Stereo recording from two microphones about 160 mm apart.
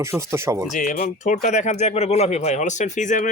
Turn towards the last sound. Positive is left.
turn(degrees=50)  # may be behind; listen again after turning